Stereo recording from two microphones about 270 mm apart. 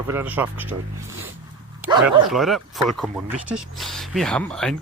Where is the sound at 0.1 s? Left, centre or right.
Centre.